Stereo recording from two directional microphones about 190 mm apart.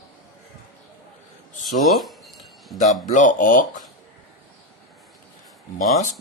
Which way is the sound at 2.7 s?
40° left (ahead or behind).